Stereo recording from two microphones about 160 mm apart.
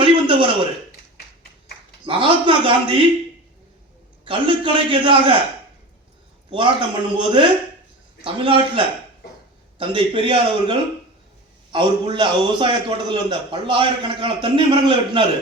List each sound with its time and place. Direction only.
0.0 s a sound: 35° right (ahead or behind)
2.0 s a man's voice: 35° right (ahead or behind)
4.3 s a man's voice: 35° right (ahead or behind)
6.5 s a man's voice: 30° right (ahead or behind)